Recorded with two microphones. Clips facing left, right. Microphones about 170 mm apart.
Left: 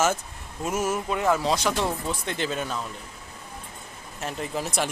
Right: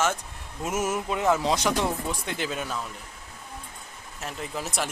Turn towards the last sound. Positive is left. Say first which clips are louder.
# left 3 dB
turn(degrees=0)  # may be behind; listen again after turning